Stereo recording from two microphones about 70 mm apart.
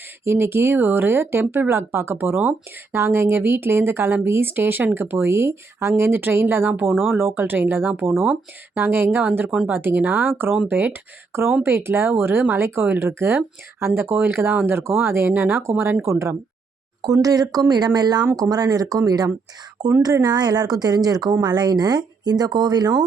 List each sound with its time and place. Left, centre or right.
0.3 s speech: right
9.5 s speech: centre
9.7 s speech: right
16.0 s speech: right
17.0 s speech: right
18.3 s speech: right
20.2 s speech: right
21.4 s speech: right